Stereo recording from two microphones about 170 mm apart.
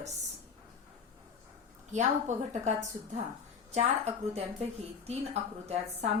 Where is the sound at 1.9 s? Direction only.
45° right (ahead or behind).